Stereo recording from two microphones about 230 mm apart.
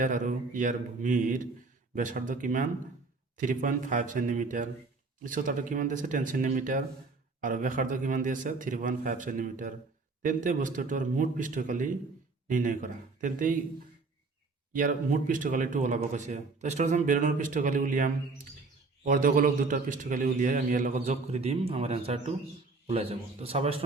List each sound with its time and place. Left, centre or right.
0.0 s speech: right
14.7 s a man's voice: right